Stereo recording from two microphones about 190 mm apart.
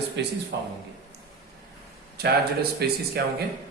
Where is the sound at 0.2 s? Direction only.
65° right (ahead or behind).